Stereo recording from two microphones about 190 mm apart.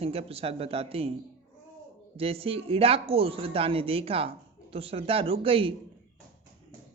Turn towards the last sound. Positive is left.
turn(degrees=-30)  # may be behind; listen again after turning